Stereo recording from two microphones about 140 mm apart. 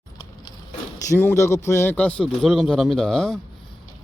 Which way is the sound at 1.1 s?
15° left (ahead or behind).